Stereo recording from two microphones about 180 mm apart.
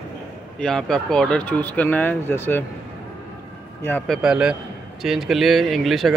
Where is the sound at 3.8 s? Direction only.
5° left (ahead or behind).